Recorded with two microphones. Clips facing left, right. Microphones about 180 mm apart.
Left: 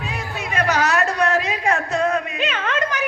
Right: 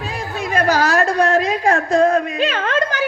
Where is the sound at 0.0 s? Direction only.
30° right (ahead or behind).